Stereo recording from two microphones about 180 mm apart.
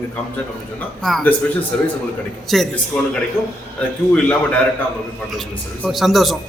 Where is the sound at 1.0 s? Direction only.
5° left (ahead or behind).